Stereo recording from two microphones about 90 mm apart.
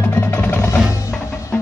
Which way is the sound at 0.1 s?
25° left (ahead or behind).